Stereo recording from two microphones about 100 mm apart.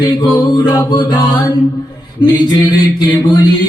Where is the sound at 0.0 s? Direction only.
45° left (ahead or behind).